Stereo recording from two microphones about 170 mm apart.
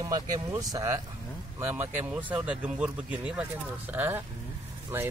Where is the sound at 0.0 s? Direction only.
20° right (ahead or behind).